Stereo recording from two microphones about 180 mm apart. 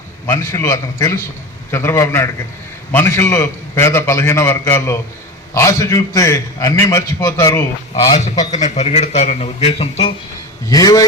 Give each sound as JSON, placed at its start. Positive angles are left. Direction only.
{"t": 0.3, "sound": "a man's voice", "side_deg": 15}
{"t": 8.6, "sound": "a man's voice", "side_deg": 35}
{"t": 10.7, "sound": "a man's voice", "side_deg": 20}